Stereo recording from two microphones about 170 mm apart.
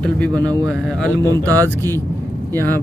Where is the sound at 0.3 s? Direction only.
20° right (ahead or behind).